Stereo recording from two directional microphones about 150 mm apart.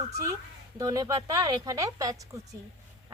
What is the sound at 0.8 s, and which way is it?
Speech, 25° right (ahead or behind).